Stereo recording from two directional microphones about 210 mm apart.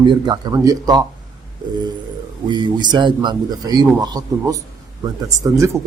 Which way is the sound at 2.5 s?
20° right (ahead or behind).